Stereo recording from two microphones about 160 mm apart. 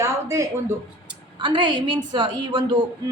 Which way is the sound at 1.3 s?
30° right (ahead or behind).